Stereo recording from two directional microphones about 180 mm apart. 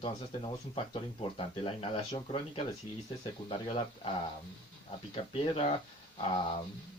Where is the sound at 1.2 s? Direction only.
30° left (ahead or behind).